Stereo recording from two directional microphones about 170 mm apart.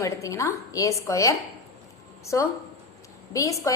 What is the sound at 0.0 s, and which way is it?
A woman's voice, 20° left (ahead or behind).